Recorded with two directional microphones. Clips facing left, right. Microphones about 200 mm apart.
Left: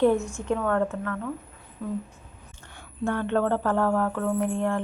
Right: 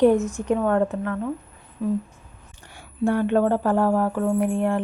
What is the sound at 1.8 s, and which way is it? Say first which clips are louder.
Speech: right 7 dB; 10° right (ahead or behind).